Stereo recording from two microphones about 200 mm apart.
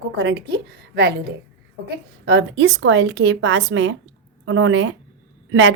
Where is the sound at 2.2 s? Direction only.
60° right (ahead or behind).